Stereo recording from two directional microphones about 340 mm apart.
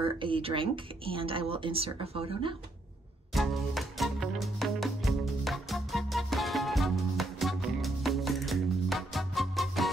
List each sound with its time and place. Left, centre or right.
0.0 s speech: centre
3.3 s music: centre